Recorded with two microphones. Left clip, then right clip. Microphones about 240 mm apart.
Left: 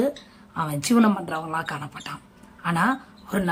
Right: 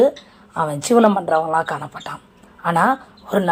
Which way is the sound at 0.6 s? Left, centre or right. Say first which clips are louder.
Right 8 dB; centre.